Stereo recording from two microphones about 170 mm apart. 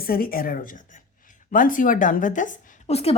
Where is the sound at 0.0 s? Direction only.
60° left (ahead or behind).